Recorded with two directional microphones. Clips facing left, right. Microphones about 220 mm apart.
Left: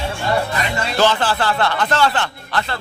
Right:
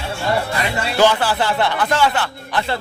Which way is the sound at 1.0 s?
10° right (ahead or behind).